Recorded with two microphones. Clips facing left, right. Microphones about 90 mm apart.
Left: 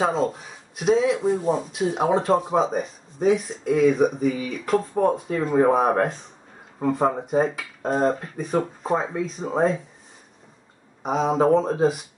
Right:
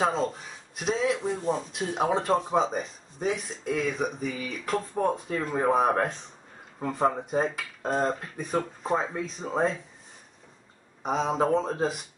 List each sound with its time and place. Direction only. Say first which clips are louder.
0.0 s speech: left 4 dB; 5° left (ahead or behind)
11.0 s speech: left 5 dB; 5° left (ahead or behind)